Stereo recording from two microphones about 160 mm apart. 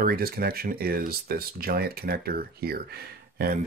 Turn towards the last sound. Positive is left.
turn(degrees=-70)  # may be behind; listen again after turning